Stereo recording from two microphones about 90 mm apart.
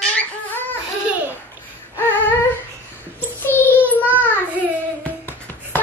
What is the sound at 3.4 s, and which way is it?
Child singing, 20° left (ahead or behind).